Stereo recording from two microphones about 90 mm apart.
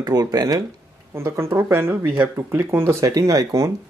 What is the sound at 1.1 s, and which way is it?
Speech, 30° right (ahead or behind).